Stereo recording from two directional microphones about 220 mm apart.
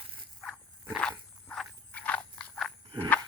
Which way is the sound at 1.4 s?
5° left (ahead or behind).